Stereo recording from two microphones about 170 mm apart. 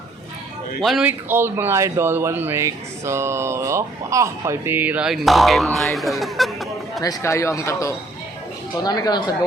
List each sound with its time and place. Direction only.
0.8 s speech: centre (ahead or behind)
1.3 s speech: 15° right (ahead or behind)
7.0 s speech: 20° left (ahead or behind)